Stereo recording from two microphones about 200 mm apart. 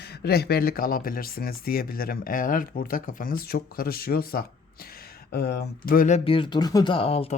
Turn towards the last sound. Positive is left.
turn(degrees=30)  # may be behind; listen again after turning